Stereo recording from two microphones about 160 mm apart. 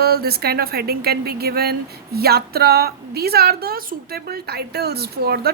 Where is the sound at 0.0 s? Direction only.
75° right (ahead or behind).